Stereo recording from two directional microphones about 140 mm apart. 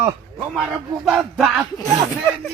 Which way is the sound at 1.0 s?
Centre (ahead or behind).